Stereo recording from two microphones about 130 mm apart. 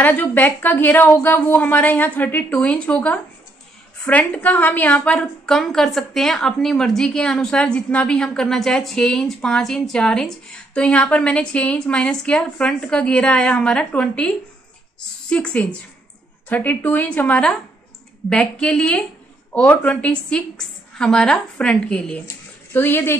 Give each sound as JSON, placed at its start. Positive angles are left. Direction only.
{"t": 0.0, "sound": "a woman's voice", "side_deg": 15}